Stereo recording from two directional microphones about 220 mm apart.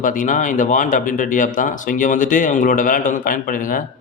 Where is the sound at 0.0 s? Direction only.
40° left (ahead or behind).